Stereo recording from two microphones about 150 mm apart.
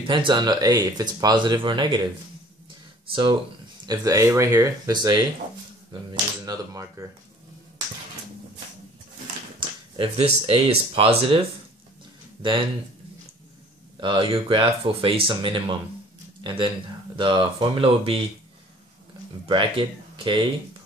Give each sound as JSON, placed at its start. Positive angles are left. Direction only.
{"t": 0.0, "sound": "speech", "side_deg": -35}
{"t": 3.1, "sound": "speech", "side_deg": -30}
{"t": 6.4, "sound": "speech", "side_deg": -25}
{"t": 9.6, "sound": "a sound", "side_deg": -35}
{"t": 9.9, "sound": "speech", "side_deg": -40}
{"t": 13.9, "sound": "speech", "side_deg": -35}
{"t": 19.4, "sound": "speech", "side_deg": -35}